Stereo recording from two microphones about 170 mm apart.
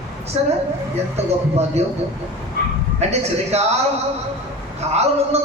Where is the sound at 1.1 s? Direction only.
40° right (ahead or behind).